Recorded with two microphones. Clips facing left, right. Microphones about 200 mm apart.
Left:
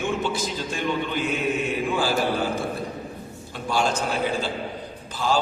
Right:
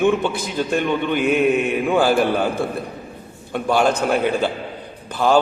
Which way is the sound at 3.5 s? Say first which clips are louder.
Right 7 dB; 60° right (ahead or behind).